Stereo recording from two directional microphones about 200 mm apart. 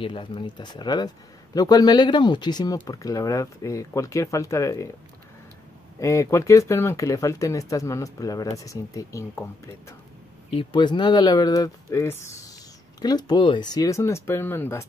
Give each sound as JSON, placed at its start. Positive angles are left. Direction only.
{"t": 0.0, "sound": "speech", "side_deg": 25}
{"t": 5.9, "sound": "speech", "side_deg": 15}
{"t": 10.5, "sound": "speech", "side_deg": 25}